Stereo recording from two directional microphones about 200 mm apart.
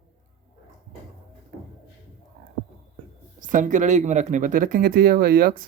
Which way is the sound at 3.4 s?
40° right (ahead or behind).